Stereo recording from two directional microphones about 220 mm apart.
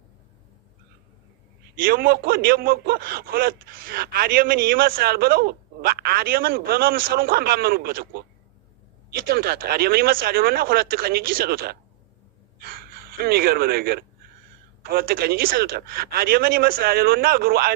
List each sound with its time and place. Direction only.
1.7 s a man's voice: 40° right (ahead or behind)